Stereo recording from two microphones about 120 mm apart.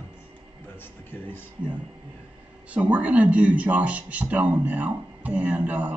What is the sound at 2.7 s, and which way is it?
Speech, 10° right (ahead or behind).